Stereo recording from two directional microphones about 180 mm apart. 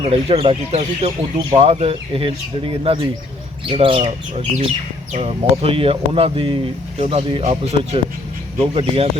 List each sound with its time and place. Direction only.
0.0 s speech: 35° right (ahead or behind)
5.1 s speech: 35° right (ahead or behind)